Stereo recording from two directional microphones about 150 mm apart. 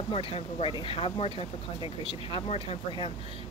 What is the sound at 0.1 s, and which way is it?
Speech, 40° left (ahead or behind).